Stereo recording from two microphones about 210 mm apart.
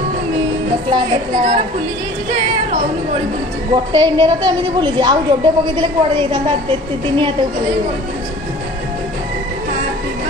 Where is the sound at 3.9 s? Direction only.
20° right (ahead or behind).